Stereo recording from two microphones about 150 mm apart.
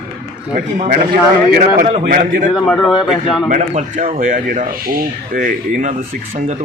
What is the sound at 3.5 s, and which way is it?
Speech, 55° right (ahead or behind).